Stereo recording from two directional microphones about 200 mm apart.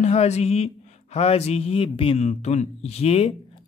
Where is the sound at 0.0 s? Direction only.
35° left (ahead or behind).